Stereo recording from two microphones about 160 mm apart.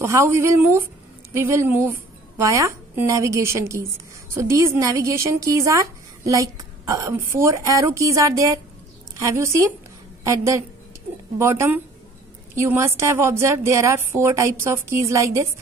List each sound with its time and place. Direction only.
0.0 s a woman's voice: 15° right (ahead or behind)